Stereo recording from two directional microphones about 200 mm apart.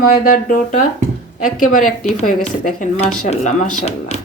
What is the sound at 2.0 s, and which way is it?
Speech, 35° left (ahead or behind).